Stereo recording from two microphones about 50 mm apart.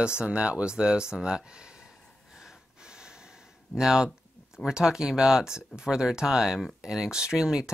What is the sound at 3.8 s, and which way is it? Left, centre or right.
Speech, centre.